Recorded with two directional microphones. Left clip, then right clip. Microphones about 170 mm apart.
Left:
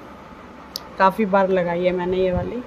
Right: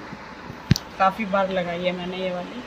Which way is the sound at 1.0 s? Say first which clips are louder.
Left 4 dB; 85° left.